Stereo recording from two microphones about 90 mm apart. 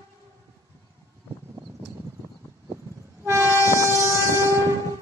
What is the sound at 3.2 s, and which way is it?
Train, 30° right (ahead or behind).